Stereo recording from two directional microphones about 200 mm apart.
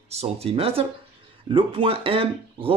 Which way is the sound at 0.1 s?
30° right (ahead or behind).